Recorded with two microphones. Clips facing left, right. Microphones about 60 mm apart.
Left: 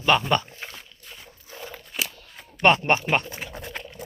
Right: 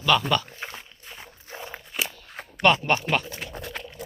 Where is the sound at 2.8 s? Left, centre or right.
Centre.